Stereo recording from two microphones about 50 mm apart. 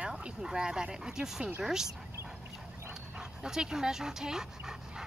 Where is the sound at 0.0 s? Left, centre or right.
Centre.